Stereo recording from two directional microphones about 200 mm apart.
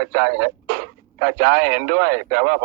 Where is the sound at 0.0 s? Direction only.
50° right (ahead or behind).